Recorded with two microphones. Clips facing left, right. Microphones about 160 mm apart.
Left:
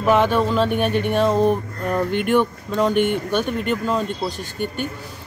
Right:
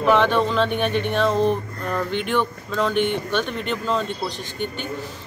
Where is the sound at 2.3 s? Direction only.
10° left (ahead or behind).